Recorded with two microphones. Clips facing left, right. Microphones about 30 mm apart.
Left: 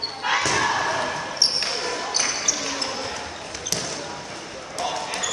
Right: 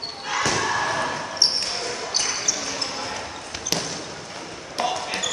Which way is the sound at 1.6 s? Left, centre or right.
Centre.